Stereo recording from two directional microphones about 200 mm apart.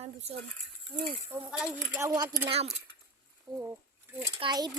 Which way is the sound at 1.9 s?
20° right (ahead or behind).